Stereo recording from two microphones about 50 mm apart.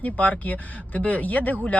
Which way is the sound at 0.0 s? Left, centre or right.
Left.